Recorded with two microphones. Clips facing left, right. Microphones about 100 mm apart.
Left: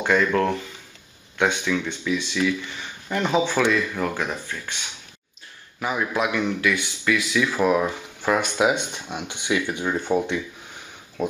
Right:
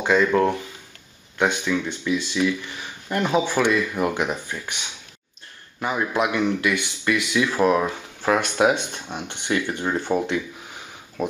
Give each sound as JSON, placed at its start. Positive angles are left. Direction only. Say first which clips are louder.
{"t": 0.0, "sound": "speech", "louder": "right 2 dB", "side_deg": -10}
{"t": 5.8, "sound": "speech", "louder": "right 1 dB", "side_deg": 0}